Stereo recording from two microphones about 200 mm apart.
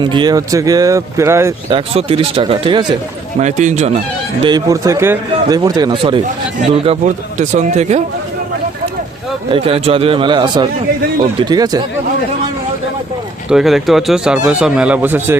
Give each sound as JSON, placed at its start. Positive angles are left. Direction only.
{"t": 0.0, "sound": "speech", "side_deg": -25}
{"t": 1.7, "sound": "a man's voice", "side_deg": -30}
{"t": 3.4, "sound": "speech", "side_deg": -35}
{"t": 4.4, "sound": "a man's voice", "side_deg": -20}
{"t": 9.5, "sound": "a man's voice", "side_deg": -30}
{"t": 13.5, "sound": "speech", "side_deg": 0}